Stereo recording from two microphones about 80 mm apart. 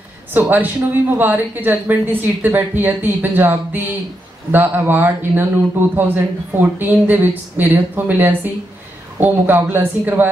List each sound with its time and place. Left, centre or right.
0.3 s a man's voice: right